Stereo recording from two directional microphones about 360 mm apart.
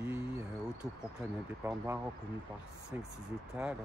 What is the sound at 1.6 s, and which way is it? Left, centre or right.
Speech, centre.